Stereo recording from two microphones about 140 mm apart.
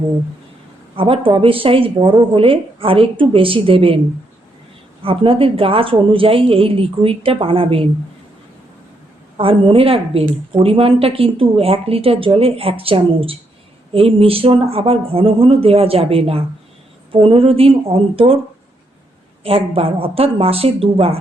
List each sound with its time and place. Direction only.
0.9 s a woman's voice: 40° right (ahead or behind)
5.0 s a woman's voice: 40° right (ahead or behind)
9.4 s a woman's voice: 40° right (ahead or behind)
19.4 s a woman's voice: 45° right (ahead or behind)